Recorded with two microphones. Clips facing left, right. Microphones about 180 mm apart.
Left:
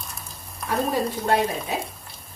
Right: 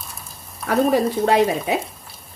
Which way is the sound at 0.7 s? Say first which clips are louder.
Right 7 dB; 75° right (ahead or behind).